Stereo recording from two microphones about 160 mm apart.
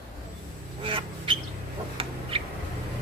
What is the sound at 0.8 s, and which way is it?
Duck, 35° right (ahead or behind).